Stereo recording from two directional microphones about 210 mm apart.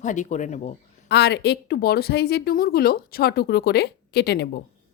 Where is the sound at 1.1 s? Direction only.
50° left (ahead or behind).